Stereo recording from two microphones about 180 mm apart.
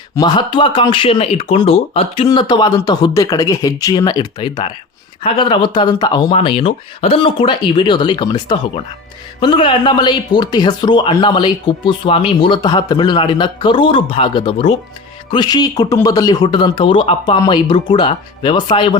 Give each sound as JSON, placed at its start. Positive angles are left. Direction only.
{"t": 0.2, "sound": "speech", "side_deg": 25}